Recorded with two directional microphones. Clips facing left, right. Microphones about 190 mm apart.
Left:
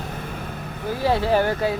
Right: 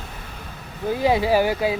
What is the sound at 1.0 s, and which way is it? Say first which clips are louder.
Speech: right 1 dB; 10° right (ahead or behind).